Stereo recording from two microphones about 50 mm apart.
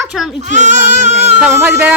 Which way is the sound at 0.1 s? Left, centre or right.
Centre.